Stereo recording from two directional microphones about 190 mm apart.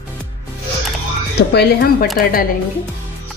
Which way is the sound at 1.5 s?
50° left (ahead or behind).